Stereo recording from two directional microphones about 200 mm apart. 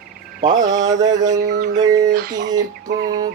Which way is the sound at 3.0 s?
20° right (ahead or behind).